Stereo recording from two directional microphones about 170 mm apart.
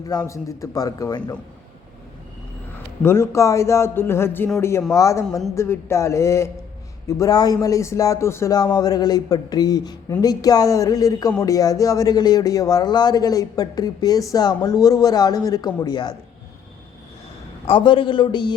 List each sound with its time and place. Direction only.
0.0 s a man's voice: 20° left (ahead or behind)
3.0 s a man's voice: 15° left (ahead or behind)
17.7 s a man's voice: 30° left (ahead or behind)